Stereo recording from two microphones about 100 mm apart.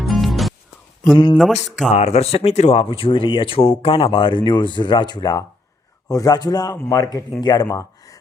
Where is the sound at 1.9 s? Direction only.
90° left.